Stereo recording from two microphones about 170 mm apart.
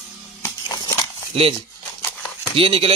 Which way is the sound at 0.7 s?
25° left (ahead or behind).